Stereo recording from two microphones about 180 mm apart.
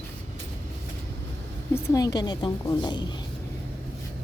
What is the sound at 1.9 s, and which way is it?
A woman's voice, 20° left (ahead or behind).